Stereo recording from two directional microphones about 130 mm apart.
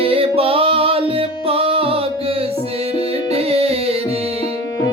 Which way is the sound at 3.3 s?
50° right (ahead or behind).